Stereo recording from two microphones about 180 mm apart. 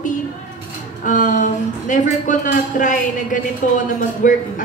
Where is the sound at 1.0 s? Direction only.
45° left (ahead or behind).